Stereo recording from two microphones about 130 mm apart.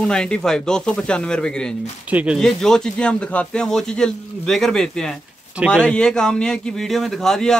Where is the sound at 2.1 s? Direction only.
10° right (ahead or behind).